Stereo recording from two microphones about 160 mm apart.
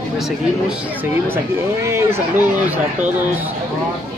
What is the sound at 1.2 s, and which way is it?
Speech, 15° right (ahead or behind).